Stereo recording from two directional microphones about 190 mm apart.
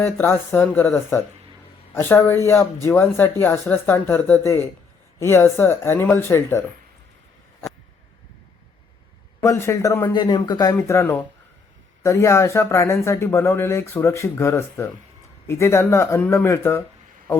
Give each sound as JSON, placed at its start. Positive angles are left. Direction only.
{"t": 0.0, "sound": "speech", "side_deg": 10}
{"t": 9.4, "sound": "speech", "side_deg": 15}